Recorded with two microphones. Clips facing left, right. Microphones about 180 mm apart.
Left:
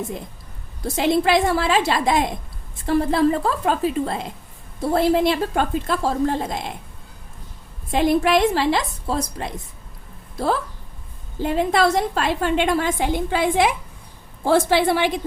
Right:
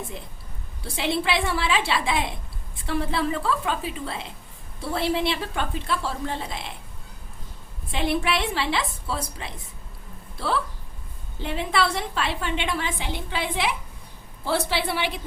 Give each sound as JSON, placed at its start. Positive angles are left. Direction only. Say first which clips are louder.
{"t": 0.8, "sound": "a woman's voice", "louder": "left 7 dB", "side_deg": 45}
{"t": 7.9, "sound": "a woman's voice", "louder": "left 7 dB", "side_deg": 40}